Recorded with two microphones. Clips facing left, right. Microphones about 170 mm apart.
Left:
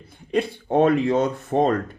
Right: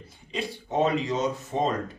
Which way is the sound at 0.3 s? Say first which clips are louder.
Left 9 dB; 55° left (ahead or behind).